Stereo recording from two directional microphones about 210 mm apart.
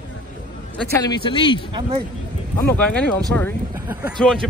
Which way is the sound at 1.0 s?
20° left (ahead or behind).